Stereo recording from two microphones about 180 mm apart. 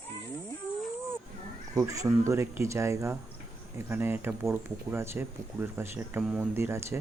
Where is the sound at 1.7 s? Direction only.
15° right (ahead or behind).